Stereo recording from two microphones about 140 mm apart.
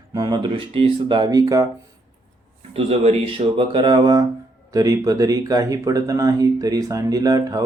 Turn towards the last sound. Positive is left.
turn(degrees=-25)  # may be behind; listen again after turning